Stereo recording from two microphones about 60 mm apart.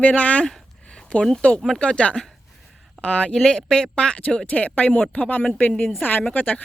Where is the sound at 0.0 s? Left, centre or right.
Left.